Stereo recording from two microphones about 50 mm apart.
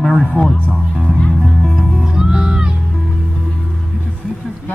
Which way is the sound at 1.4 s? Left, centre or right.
Centre.